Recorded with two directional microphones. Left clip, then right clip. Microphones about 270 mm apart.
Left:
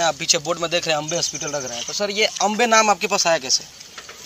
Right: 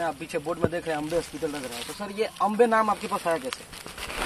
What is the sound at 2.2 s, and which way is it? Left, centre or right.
Speech, left.